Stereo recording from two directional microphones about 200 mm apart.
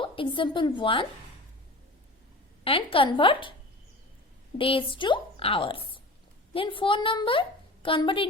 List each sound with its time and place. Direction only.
0.0 s a woman's voice: 25° left (ahead or behind)
2.6 s a woman's voice: 25° left (ahead or behind)
4.5 s a woman's voice: 25° left (ahead or behind)